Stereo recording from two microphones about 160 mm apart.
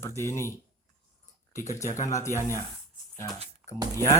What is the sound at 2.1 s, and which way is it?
Speech, 20° left (ahead or behind).